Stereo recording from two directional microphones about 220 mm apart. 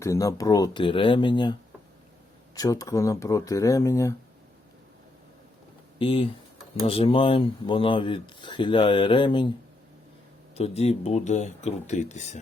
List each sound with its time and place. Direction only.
0.0 s speech: 15° left (ahead or behind)
2.6 s speech: 15° left (ahead or behind)
6.0 s speech: 25° left (ahead or behind)
10.5 s speech: 30° left (ahead or behind)